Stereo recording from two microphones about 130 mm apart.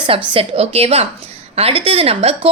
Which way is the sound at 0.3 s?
50° right (ahead or behind).